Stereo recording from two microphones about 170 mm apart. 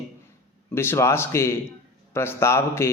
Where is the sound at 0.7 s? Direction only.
15° left (ahead or behind).